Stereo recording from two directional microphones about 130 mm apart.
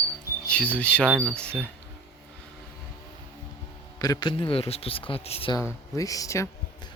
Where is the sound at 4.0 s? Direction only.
30° left (ahead or behind); by 5.5 s 50° left (ahead or behind).